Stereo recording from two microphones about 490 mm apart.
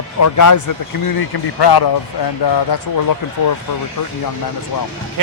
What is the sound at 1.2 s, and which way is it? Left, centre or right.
Speech, left.